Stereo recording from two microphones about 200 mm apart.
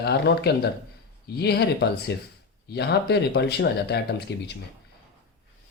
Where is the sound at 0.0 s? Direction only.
55° left (ahead or behind).